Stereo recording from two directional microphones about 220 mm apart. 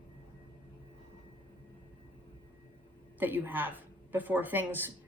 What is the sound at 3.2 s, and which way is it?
A woman's voice, 10° right (ahead or behind).